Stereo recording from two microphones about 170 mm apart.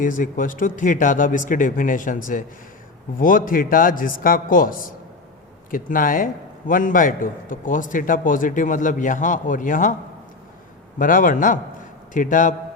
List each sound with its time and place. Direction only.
0.0 s a man's voice: 50° left (ahead or behind)
10.9 s a man's voice: 55° left (ahead or behind)